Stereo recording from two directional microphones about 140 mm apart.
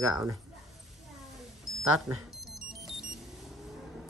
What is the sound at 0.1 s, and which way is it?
Speech, 20° right (ahead or behind).